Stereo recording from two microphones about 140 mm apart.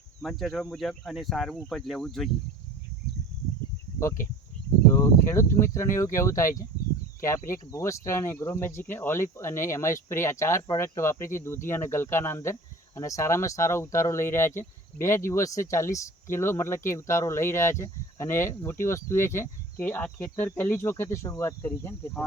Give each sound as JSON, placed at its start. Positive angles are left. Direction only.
{"t": 0.2, "sound": "speech", "side_deg": 0}
{"t": 4.0, "sound": "speech", "side_deg": 20}
{"t": 5.2, "sound": "speech", "side_deg": 20}